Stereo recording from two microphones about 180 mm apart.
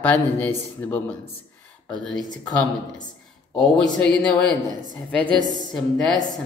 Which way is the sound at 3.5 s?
5° left (ahead or behind).